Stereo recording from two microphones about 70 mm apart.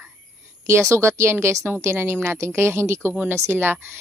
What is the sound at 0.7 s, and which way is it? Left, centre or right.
Speech, right.